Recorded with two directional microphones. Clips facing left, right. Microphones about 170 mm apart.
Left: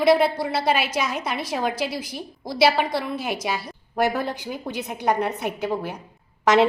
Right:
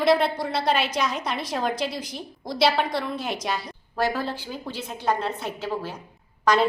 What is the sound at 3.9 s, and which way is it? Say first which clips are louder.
A woman's voice: left 3 dB; 20° left (ahead or behind).